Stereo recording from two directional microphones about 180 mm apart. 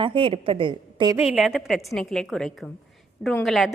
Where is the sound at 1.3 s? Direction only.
5° right (ahead or behind).